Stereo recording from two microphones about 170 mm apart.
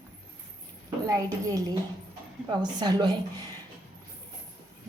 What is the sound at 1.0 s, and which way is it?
Speech, 20° right (ahead or behind).